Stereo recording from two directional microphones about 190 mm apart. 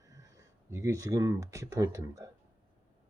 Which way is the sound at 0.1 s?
15° right (ahead or behind).